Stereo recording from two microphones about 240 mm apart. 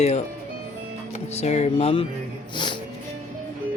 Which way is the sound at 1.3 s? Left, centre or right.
Left.